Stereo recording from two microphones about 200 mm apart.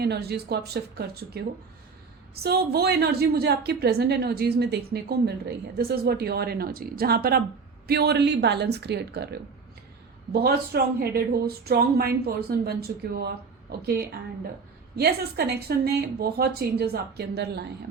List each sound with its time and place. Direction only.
0.0 s a woman's voice: 55° right (ahead or behind)